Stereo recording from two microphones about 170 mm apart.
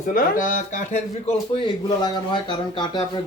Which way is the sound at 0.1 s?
55° left (ahead or behind).